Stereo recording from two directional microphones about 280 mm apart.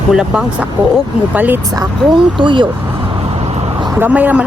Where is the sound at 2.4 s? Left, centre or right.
Centre.